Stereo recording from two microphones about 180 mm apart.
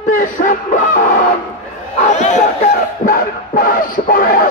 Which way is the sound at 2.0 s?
40° left (ahead or behind).